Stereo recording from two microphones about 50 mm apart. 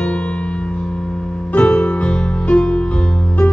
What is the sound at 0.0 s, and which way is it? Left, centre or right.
Music, left.